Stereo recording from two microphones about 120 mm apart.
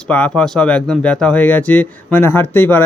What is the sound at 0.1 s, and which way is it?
Speech, 10° left (ahead or behind).